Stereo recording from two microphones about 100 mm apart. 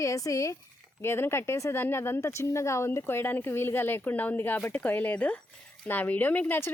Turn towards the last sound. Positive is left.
turn(degrees=20)  # may be behind; listen again after turning